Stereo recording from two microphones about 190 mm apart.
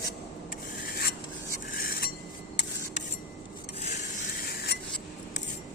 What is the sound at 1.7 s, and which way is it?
Stir, 50° left (ahead or behind).